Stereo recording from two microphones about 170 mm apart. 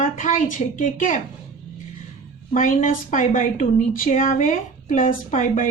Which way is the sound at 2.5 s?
50° left (ahead or behind).